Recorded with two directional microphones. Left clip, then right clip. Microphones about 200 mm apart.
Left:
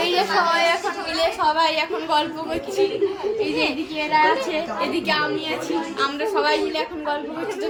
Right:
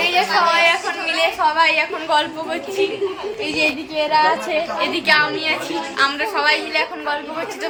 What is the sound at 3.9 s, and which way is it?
Speech, 35° right (ahead or behind).